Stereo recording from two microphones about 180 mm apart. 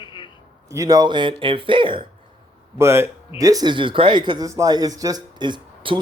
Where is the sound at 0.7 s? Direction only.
20° right (ahead or behind).